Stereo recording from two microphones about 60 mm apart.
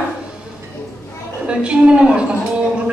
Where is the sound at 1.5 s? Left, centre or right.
Centre.